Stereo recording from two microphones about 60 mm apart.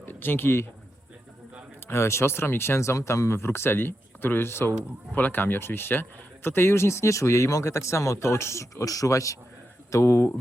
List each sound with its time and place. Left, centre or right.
0.0 s speech: left
1.9 s speech: left